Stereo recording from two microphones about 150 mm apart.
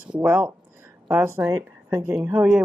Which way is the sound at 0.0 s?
10° right (ahead or behind).